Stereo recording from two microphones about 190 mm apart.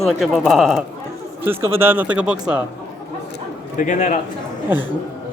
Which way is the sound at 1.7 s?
10° right (ahead or behind).